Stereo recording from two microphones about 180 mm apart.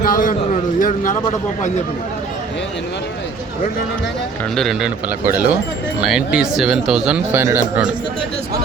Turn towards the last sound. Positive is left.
turn(degrees=-15)  # may be behind; listen again after turning